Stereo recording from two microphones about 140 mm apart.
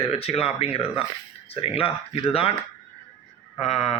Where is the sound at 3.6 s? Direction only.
50° left (ahead or behind).